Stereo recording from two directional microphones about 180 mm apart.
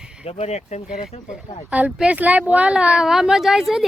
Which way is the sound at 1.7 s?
5° right (ahead or behind).